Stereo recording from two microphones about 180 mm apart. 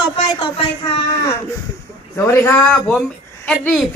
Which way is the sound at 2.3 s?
15° left (ahead or behind).